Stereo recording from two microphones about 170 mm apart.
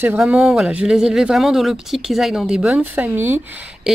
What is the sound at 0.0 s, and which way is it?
Speech, 10° right (ahead or behind).